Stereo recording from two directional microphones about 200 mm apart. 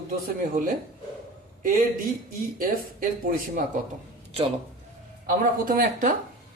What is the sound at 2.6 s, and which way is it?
A man's voice, 45° right (ahead or behind).